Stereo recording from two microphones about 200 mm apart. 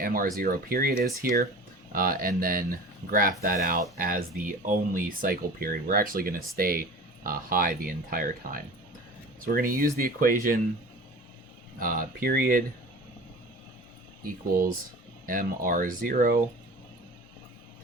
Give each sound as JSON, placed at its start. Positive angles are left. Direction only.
{"t": 0.0, "sound": "speech", "side_deg": -45}
{"t": 11.8, "sound": "speech", "side_deg": -45}
{"t": 15.3, "sound": "speech", "side_deg": -45}